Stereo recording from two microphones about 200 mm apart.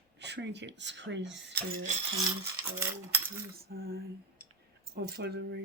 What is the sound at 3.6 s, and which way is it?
Speech, 50° right (ahead or behind).